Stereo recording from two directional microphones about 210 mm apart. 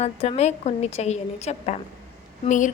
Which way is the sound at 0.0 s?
30° left (ahead or behind).